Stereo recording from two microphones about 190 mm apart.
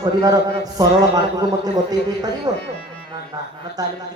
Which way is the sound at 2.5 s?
20° right (ahead or behind).